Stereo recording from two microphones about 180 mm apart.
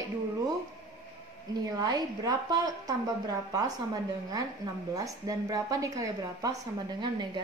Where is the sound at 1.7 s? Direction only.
20° right (ahead or behind).